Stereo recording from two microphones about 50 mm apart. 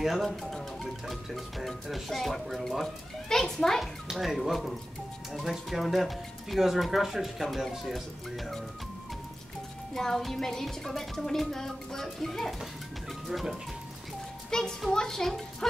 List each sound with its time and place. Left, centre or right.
0.0 s speech: centre
4.1 s speech: centre
9.9 s speech: centre
14.5 s speech: centre